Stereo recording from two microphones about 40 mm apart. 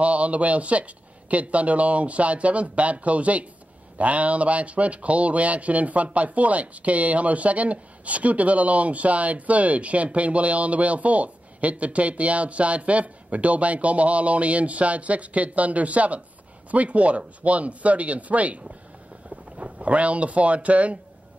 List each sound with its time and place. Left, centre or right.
0.0 s speech: right